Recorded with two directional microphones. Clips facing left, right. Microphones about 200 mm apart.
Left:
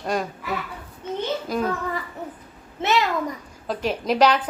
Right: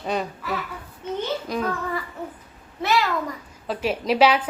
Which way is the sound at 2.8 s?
20° left (ahead or behind).